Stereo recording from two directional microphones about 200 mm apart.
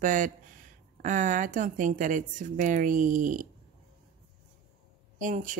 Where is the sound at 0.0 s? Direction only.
40° right (ahead or behind).